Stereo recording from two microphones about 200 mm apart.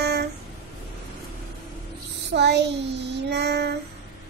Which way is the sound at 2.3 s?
60° right (ahead or behind).